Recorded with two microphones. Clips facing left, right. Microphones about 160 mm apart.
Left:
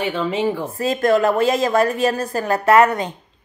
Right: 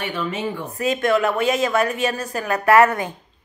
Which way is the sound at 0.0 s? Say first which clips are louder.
Left 5 dB; 30° left (ahead or behind).